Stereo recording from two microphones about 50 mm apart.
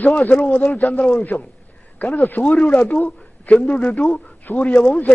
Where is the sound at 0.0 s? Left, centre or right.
Left.